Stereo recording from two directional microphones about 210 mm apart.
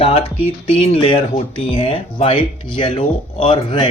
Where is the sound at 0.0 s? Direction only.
25° left (ahead or behind).